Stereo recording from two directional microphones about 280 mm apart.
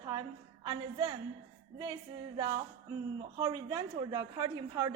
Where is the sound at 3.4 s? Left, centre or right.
Centre.